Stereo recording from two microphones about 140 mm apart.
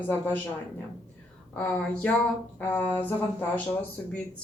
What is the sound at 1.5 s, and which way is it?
Speech, 10° left (ahead or behind).